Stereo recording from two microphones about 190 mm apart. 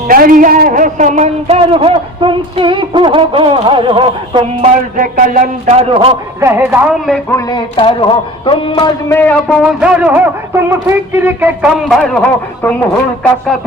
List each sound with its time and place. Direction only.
0.1 s a man's voice: 45° right (ahead or behind); by 4.7 s 30° right (ahead or behind)
4.9 s speech: 45° right (ahead or behind)
6.4 s speech: 10° right (ahead or behind)
7.3 s speech: 20° left (ahead or behind)
9.0 s a man's voice: 10° left (ahead or behind)
9.6 s speech: 5° right (ahead or behind)